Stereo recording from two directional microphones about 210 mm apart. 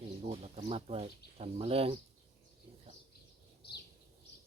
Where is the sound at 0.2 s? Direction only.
30° right (ahead or behind).